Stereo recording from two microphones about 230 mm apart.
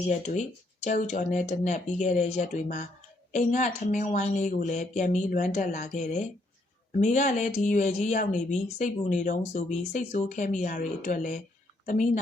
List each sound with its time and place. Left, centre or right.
0.1 s speech: left